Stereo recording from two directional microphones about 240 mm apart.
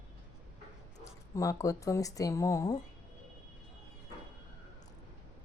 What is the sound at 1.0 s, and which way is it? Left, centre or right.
Speech, centre.